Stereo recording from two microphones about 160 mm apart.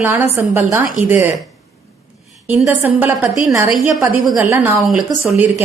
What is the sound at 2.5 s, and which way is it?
A woman's voice, 10° right (ahead or behind).